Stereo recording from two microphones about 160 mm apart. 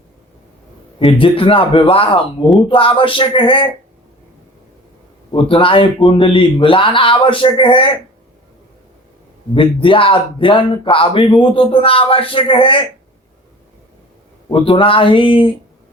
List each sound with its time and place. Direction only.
0.9 s speech: 35° left (ahead or behind)
5.3 s speech: 35° left (ahead or behind)
9.6 s speech: 35° left (ahead or behind)
14.5 s speech: 35° left (ahead or behind)